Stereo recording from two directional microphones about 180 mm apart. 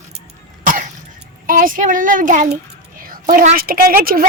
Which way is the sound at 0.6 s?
45° right (ahead or behind).